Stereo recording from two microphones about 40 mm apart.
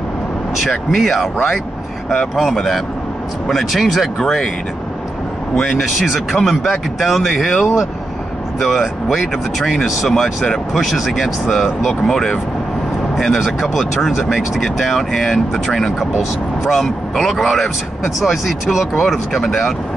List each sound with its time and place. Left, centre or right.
0.7 s speech: centre
2.5 s speech: centre
5.6 s speech: centre
5.9 s speech: centre
6.1 s speech: centre
7.6 s speech: centre
8.5 s speech: centre
12.0 s speech: centre
13.4 s speech: centre
14.6 s speech: centre